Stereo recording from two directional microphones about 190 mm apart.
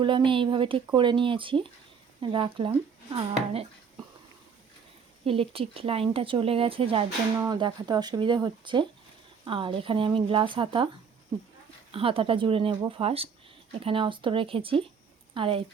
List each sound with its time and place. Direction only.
0.0 s speech: 25° right (ahead or behind)
5.2 s speech: 30° right (ahead or behind)
11.9 s speech: 30° right (ahead or behind)